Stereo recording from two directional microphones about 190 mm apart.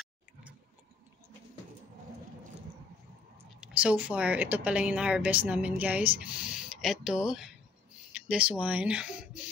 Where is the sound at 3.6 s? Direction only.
5° right (ahead or behind).